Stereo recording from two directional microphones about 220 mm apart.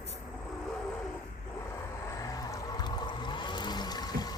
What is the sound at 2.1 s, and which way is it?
Vehicle, 15° left (ahead or behind).